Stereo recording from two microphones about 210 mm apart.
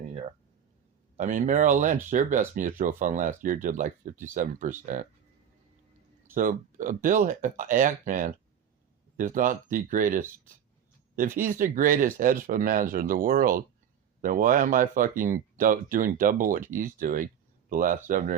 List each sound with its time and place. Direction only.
1.1 s speech: 40° right (ahead or behind)
6.3 s speech: 40° right (ahead or behind)